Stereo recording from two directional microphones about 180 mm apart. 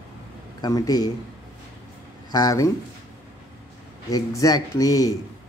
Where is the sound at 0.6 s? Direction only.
20° left (ahead or behind).